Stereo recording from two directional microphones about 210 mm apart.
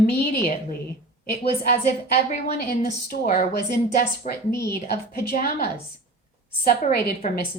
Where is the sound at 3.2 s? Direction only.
40° left (ahead or behind).